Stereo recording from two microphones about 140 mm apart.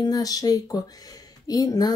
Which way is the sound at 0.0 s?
25° left (ahead or behind).